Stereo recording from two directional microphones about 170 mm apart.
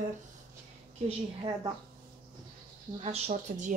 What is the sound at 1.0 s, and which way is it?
Speech, 30° right (ahead or behind).